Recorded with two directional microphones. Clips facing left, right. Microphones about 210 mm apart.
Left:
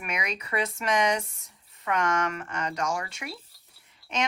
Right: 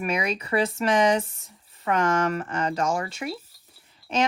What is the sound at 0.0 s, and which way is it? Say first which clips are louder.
Speech: right 7 dB; 30° right (ahead or behind).